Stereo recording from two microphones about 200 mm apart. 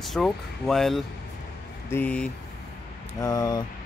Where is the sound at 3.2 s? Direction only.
20° left (ahead or behind).